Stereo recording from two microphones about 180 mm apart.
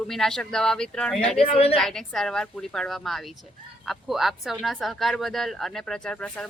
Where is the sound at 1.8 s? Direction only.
Centre (ahead or behind).